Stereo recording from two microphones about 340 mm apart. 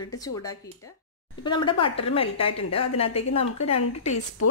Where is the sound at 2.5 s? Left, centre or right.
Left.